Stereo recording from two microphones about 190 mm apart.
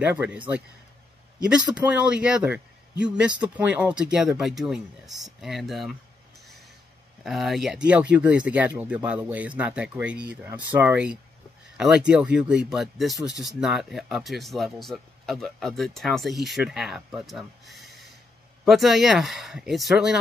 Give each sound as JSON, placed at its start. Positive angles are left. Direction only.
{"t": 0.0, "sound": "speech", "side_deg": -10}
{"t": 1.8, "sound": "speech", "side_deg": -5}
{"t": 7.2, "sound": "speech", "side_deg": 0}